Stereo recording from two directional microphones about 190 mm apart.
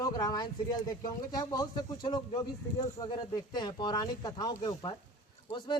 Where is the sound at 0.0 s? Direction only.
20° left (ahead or behind).